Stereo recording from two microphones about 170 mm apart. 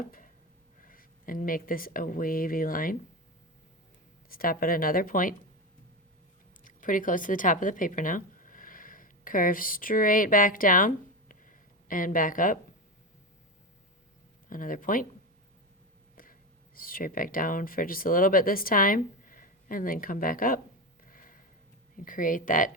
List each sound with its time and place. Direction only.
0.8 s speech: 55° left (ahead or behind)
4.3 s speech: 60° left (ahead or behind)
6.7 s speech: 50° left (ahead or behind)
14.5 s speech: 55° left (ahead or behind)
16.7 s speech: 55° left (ahead or behind)
21.0 s a sound: 55° left (ahead or behind)
22.0 s speech: 50° left (ahead or behind)